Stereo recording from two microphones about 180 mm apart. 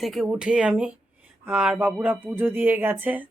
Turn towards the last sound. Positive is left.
turn(degrees=-10)  # may be behind; listen again after turning